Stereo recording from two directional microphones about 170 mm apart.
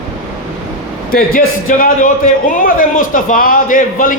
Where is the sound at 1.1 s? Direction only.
55° left (ahead or behind).